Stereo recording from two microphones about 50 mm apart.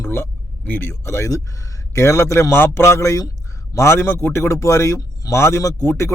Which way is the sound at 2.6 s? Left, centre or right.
Left.